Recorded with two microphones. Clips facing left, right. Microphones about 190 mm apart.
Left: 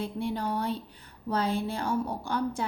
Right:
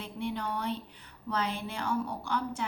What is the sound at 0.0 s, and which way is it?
A woman's voice, 40° left (ahead or behind).